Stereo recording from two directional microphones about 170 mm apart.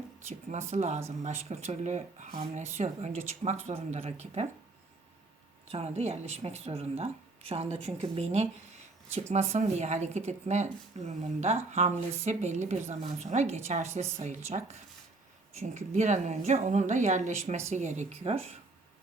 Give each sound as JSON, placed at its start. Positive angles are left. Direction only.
{"t": 0.7, "sound": "speech", "side_deg": -40}
{"t": 5.7, "sound": "speech", "side_deg": -40}